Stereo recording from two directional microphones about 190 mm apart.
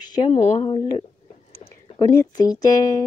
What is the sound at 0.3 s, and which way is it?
Speech, 35° left (ahead or behind).